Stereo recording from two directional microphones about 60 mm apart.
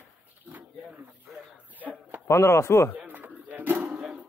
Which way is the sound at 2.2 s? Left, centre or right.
Left.